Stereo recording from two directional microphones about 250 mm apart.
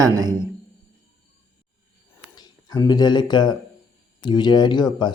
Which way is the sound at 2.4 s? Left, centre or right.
Centre.